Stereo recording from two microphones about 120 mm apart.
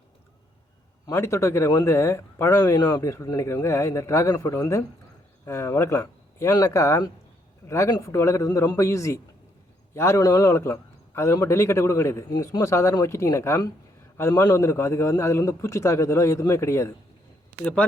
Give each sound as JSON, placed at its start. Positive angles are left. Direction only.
{"t": 1.0, "sound": "speech", "side_deg": 25}